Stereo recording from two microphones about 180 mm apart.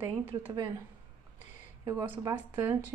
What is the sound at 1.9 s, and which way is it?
Speech, 15° right (ahead or behind).